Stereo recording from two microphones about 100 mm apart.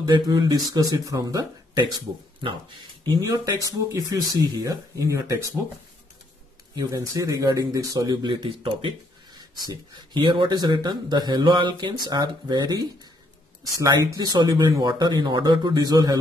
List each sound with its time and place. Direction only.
0.1 s speech: 50° right (ahead or behind)
0.5 s speech: 35° right (ahead or behind)
3.2 s speech: 35° right (ahead or behind)
6.7 s speech: 35° right (ahead or behind)
8.2 s speech: 50° right (ahead or behind)
13.7 s speech: 35° right (ahead or behind)